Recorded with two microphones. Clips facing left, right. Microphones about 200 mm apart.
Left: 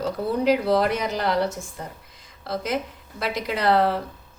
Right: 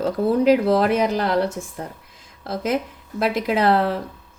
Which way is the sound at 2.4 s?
50° right (ahead or behind).